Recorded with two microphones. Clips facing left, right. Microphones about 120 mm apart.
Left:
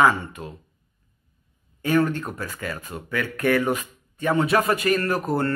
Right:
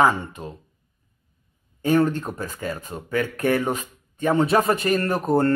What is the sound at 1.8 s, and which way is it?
Speech, 35° right (ahead or behind).